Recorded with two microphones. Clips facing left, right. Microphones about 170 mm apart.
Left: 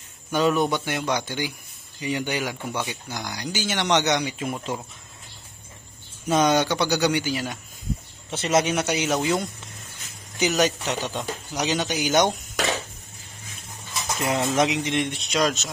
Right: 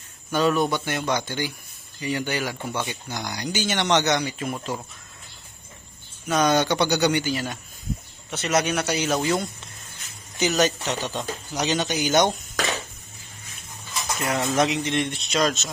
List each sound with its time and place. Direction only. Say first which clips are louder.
0.3 s speech: even; 15° left (ahead or behind)
6.2 s speech: left 1 dB; 25° left (ahead or behind)
6.5 s speech: right 1 dB; 10° left (ahead or behind)
8.3 s speech: left 1 dB; 25° left (ahead or behind)
9.1 s speech: even; 5° left (ahead or behind)
14.2 s speech: left 1 dB; 20° left (ahead or behind)